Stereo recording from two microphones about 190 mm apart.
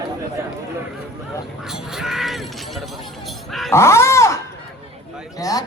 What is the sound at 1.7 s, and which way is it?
Speech, centre (ahead or behind).